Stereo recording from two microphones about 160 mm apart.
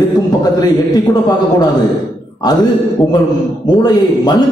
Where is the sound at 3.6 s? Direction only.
25° left (ahead or behind).